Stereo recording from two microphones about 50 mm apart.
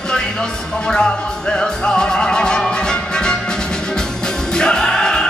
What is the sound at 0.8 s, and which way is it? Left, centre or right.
Music, centre.